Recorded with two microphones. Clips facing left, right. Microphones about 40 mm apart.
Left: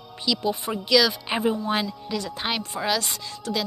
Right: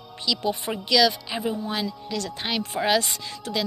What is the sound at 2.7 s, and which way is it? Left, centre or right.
Speech, centre.